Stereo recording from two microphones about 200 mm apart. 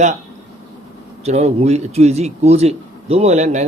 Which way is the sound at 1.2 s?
30° right (ahead or behind).